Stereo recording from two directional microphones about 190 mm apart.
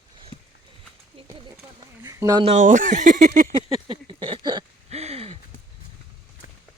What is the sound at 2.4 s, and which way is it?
Speech, 35° right (ahead or behind).